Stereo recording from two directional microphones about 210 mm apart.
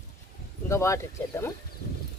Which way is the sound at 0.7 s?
15° left (ahead or behind).